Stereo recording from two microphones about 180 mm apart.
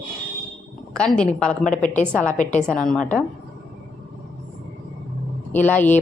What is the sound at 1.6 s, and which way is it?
Speech, 45° left (ahead or behind).